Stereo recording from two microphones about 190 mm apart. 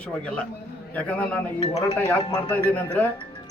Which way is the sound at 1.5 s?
30° left (ahead or behind).